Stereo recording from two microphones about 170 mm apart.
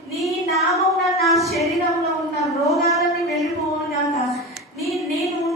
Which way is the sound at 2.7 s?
Centre (ahead or behind).